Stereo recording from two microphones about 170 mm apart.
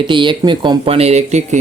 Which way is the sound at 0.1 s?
30° right (ahead or behind).